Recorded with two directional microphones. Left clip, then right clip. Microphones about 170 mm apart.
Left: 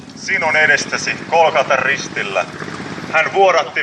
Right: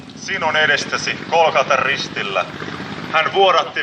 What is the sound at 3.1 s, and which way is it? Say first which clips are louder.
Speech: left 1 dB; 10° left (ahead or behind).